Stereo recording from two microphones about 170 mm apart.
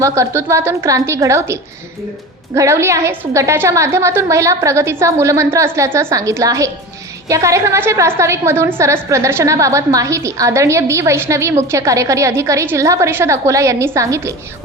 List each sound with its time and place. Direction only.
0.0 s a woman's voice: 15° right (ahead or behind)
2.6 s a woman's voice: 15° right (ahead or behind)